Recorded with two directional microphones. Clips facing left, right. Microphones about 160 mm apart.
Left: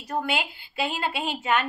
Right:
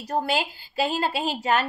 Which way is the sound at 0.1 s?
35° right (ahead or behind).